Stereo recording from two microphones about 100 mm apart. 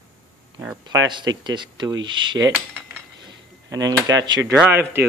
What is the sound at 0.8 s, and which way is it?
Speech, 45° right (ahead or behind).